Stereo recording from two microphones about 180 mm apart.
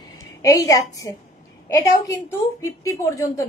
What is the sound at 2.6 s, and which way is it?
Speech, 15° left (ahead or behind).